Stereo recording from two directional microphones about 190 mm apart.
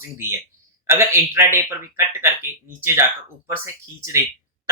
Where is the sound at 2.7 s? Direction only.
15° right (ahead or behind).